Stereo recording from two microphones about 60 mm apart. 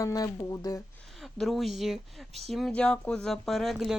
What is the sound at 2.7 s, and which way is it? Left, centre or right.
Speech, centre.